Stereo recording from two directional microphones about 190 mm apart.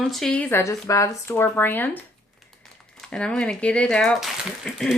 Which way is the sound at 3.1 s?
5° left (ahead or behind).